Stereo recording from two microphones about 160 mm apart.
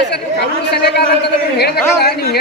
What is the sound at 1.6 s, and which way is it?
Speech, 80° left.